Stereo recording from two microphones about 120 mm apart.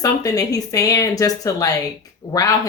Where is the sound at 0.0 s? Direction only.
30° left (ahead or behind).